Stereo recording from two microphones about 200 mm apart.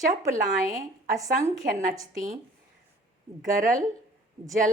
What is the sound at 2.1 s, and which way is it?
Speech, 40° right (ahead or behind).